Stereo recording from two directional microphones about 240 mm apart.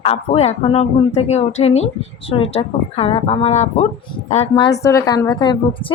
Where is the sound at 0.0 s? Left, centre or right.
Left.